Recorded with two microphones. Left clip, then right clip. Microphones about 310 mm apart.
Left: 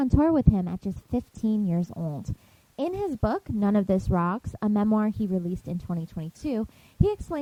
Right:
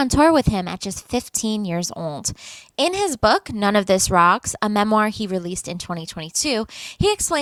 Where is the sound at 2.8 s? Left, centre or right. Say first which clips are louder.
Right 10 dB; centre.